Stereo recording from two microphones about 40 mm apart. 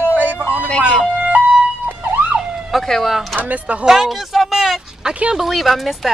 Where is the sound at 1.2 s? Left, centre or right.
Right.